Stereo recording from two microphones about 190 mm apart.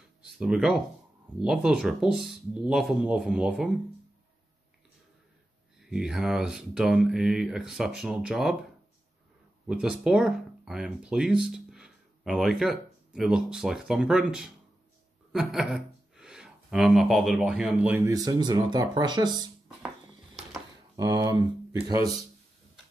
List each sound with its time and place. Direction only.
0.2 s speech: 5° right (ahead or behind)
5.9 s speech: 5° right (ahead or behind)
9.7 s speech: 5° right (ahead or behind)
15.3 s a sound: centre (ahead or behind)
17.4 s speech: 5° right (ahead or behind); by 19.3 s 25° right (ahead or behind)
20.9 s speech: 20° right (ahead or behind)